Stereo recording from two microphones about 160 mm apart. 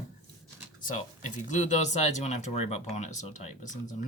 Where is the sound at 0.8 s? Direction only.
50° left (ahead or behind).